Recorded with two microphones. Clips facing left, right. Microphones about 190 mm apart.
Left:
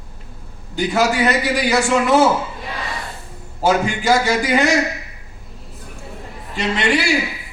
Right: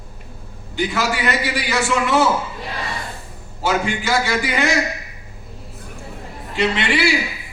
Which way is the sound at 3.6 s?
40° left (ahead or behind).